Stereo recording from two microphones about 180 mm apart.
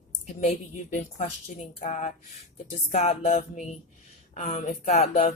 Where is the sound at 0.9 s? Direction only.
40° left (ahead or behind).